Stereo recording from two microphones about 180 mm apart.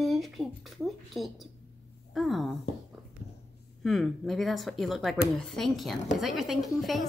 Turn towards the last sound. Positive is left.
turn(degrees=0)  # may be behind; listen again after turning